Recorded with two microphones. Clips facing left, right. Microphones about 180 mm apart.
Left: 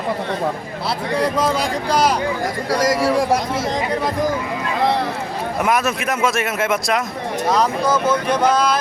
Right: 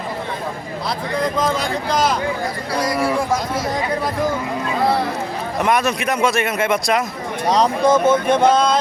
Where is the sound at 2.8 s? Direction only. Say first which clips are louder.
Left 2 dB; 90° left.